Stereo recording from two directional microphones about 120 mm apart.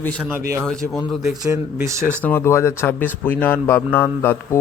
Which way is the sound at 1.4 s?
25° right (ahead or behind).